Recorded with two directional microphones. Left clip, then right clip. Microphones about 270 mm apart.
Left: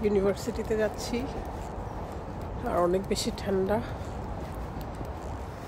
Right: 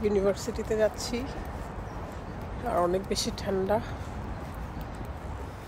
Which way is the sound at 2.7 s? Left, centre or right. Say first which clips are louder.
Left 1 dB; centre.